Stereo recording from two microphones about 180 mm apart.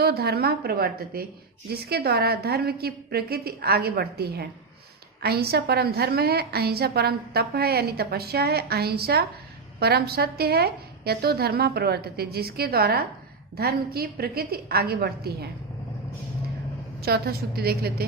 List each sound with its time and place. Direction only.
0.0 s a woman's voice: 60° right (ahead or behind)
17.0 s a woman's voice: 60° right (ahead or behind)